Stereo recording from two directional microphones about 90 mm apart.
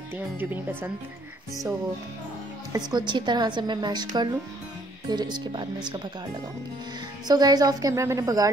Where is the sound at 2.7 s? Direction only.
50° right (ahead or behind).